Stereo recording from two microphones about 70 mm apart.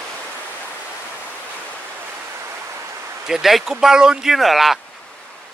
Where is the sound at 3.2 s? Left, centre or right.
Centre.